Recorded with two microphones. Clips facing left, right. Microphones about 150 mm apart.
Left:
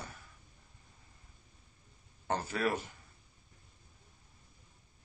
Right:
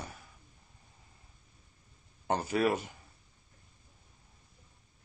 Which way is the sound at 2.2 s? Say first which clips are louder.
Right 4 dB; 15° right (ahead or behind).